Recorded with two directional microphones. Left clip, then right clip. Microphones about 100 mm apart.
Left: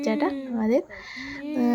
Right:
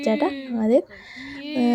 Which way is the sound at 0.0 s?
25° right (ahead or behind).